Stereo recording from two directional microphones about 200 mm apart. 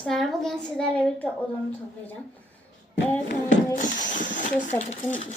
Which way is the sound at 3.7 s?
40° left (ahead or behind).